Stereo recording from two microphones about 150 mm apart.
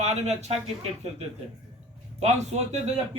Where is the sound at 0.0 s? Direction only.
45° right (ahead or behind).